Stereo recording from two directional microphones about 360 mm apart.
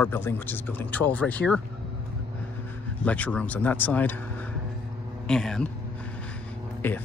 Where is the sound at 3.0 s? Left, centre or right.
Centre.